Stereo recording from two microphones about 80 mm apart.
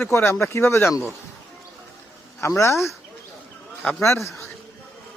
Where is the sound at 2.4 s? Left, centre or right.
Left.